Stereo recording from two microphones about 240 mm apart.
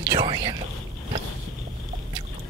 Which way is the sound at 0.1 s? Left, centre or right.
Centre.